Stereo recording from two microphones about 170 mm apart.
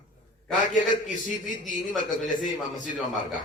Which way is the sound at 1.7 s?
Centre (ahead or behind).